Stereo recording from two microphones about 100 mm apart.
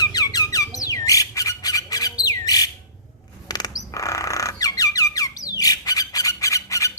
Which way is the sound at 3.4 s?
40° left (ahead or behind).